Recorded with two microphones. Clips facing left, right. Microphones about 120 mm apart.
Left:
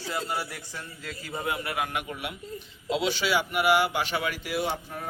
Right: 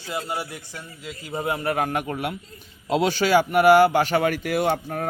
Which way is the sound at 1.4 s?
35° right (ahead or behind).